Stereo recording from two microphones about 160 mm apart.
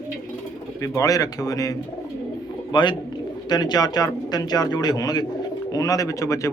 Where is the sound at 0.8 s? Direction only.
20° left (ahead or behind).